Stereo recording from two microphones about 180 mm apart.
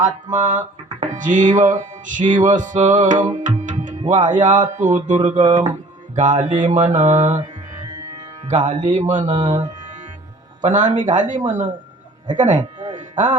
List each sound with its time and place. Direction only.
0.0 s music: 45° right (ahead or behind)
8.4 s music: 40° right (ahead or behind)
10.6 s music: 45° right (ahead or behind)
12.9 s a sound: 45° right (ahead or behind)